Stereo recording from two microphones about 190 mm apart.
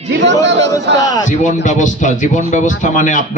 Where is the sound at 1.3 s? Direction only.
40° left (ahead or behind).